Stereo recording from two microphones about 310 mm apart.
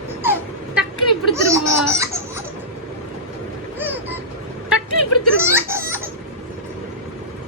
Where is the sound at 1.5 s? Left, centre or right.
Centre.